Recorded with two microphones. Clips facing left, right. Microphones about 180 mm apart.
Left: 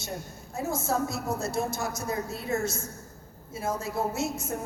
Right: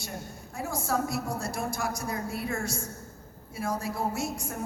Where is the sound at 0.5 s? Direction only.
25° left (ahead or behind).